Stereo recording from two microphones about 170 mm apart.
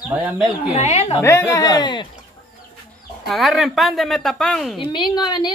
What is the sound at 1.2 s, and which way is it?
Speech, 15° left (ahead or behind).